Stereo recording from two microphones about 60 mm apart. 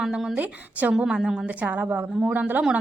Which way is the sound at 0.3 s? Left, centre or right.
Right.